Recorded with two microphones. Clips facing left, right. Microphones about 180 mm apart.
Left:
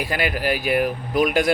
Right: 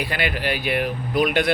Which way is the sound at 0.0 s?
40° left (ahead or behind).